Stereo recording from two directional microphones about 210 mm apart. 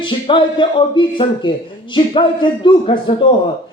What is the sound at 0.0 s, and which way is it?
Speech, 20° left (ahead or behind).